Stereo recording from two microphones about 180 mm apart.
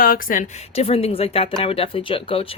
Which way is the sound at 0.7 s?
35° left (ahead or behind).